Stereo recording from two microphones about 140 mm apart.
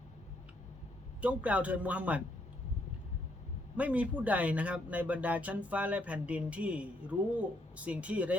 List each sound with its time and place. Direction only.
1.2 s speech: 10° right (ahead or behind)
3.8 s speech: 10° right (ahead or behind)